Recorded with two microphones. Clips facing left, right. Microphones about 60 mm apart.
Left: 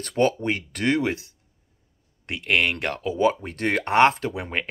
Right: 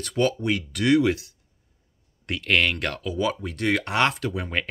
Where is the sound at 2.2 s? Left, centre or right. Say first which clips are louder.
Even; centre.